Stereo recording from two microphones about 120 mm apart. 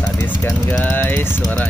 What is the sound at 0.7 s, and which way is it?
Speech, 15° left (ahead or behind).